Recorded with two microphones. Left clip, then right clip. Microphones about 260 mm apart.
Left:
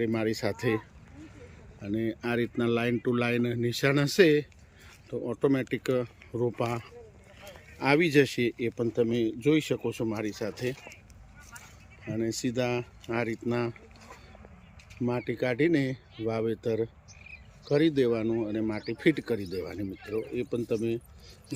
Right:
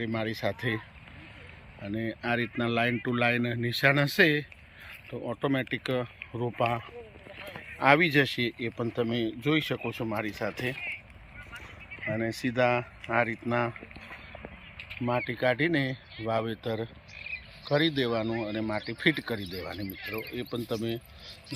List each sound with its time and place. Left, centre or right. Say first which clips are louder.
0.0 s speech: left 2 dB; centre
12.1 s speech: even; centre
15.0 s speech: right 2 dB; centre
16.2 s cricket: left 1 dB; centre